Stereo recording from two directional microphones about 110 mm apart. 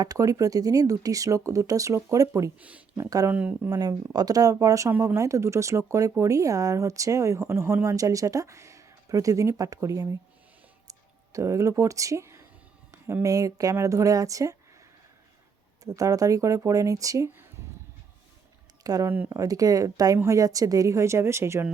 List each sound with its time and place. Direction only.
0.0 s speech: 35° right (ahead or behind)
2.6 s speech: 15° right (ahead or behind)
3.0 s speech: 30° right (ahead or behind)
3.3 s speech: 15° right (ahead or behind)
3.7 s speech: 35° right (ahead or behind)
10.8 s a sound: 30° right (ahead or behind)
13.2 s speech: 30° right (ahead or behind)
15.8 s speech: 30° right (ahead or behind)
18.8 s speech: 35° right (ahead or behind)
19.0 s speech: 15° right (ahead or behind)
19.3 s speech: 35° right (ahead or behind)